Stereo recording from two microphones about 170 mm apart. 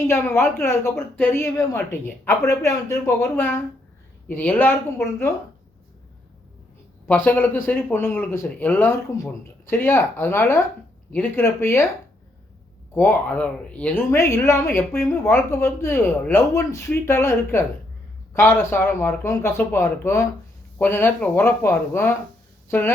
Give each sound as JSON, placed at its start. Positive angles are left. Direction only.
{"t": 0.1, "sound": "a woman's voice", "side_deg": 15}
{"t": 7.1, "sound": "a woman's voice", "side_deg": 10}
{"t": 12.9, "sound": "a woman's voice", "side_deg": 10}